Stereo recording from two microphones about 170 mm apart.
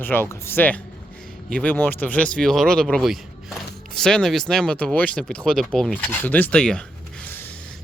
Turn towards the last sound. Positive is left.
turn(degrees=5)  # may be behind; listen again after turning